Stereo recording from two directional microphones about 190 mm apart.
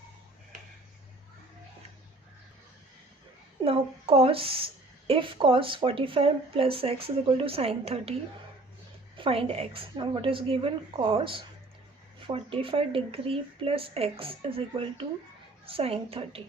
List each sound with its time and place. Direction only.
3.6 s a woman's voice: 30° right (ahead or behind)
9.1 s a woman's voice: 30° right (ahead or behind)